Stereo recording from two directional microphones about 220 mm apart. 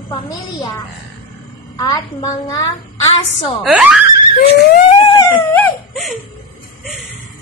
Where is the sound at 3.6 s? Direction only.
Centre (ahead or behind).